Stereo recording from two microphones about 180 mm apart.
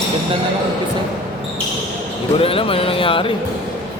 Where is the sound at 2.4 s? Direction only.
30° left (ahead or behind).